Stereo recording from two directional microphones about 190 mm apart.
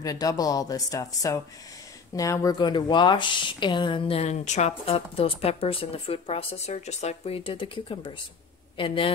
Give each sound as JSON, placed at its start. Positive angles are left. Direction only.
{"t": 0.0, "sound": "speech", "side_deg": 20}